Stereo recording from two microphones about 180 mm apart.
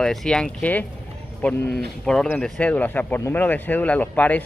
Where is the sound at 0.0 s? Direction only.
Centre (ahead or behind).